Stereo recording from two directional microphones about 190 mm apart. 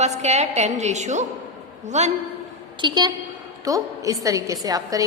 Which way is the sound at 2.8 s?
20° right (ahead or behind).